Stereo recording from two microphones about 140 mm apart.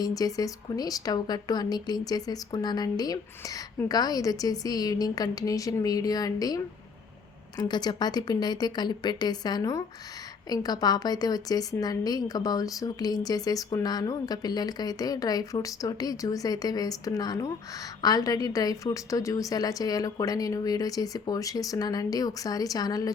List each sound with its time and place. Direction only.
0.0 s speech: 25° left (ahead or behind)